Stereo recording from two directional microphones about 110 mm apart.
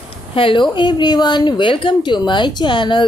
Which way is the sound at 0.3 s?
50° left (ahead or behind).